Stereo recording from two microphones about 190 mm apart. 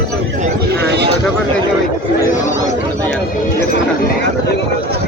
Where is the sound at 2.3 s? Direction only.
40° left (ahead or behind).